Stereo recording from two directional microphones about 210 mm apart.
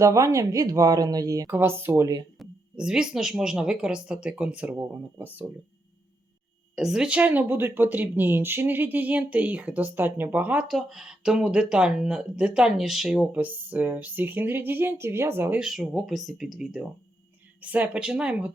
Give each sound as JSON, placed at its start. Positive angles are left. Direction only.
{"t": 0.0, "sound": "speech", "side_deg": -15}
{"t": 2.4, "sound": "speech", "side_deg": -5}
{"t": 6.7, "sound": "speech", "side_deg": 0}